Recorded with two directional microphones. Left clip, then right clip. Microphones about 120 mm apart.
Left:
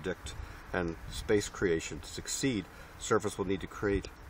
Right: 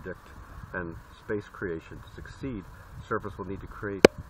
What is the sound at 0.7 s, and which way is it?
Speech, 30° left (ahead or behind).